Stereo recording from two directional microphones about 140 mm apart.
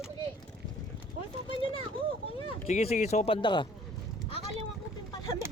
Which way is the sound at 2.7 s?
55° left (ahead or behind).